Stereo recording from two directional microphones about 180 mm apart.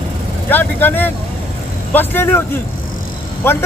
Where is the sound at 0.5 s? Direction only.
10° left (ahead or behind).